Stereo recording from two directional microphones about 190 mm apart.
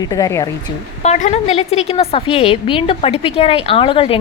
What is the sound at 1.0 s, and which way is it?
A woman's voice, 35° left (ahead or behind).